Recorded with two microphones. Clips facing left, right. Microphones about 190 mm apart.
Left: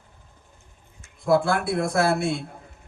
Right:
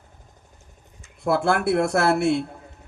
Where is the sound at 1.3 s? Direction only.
60° right (ahead or behind).